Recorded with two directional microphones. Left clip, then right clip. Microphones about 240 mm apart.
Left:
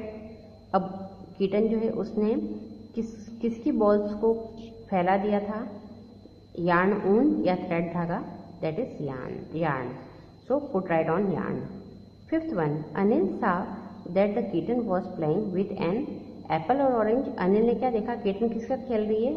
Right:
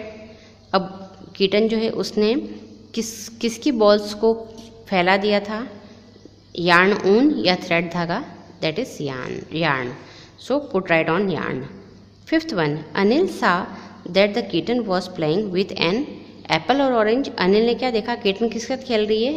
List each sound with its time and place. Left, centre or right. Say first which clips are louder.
1.4 s a woman's voice: right 7 dB; right